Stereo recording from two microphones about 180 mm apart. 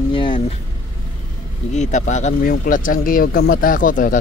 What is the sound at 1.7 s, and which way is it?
Speech, 40° left (ahead or behind).